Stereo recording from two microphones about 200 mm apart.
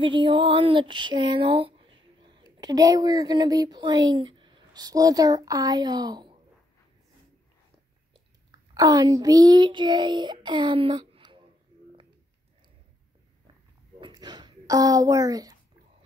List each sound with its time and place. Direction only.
0.0 s a sound: 25° right (ahead or behind)
8.1 s a child's voice: 20° right (ahead or behind)
14.0 s speech: 20° right (ahead or behind)